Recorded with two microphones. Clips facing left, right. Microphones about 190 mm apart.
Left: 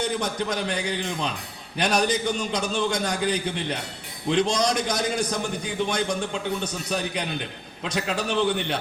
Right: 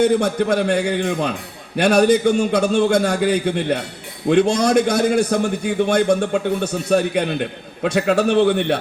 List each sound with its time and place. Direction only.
0.1 s a man's voice: 60° right (ahead or behind)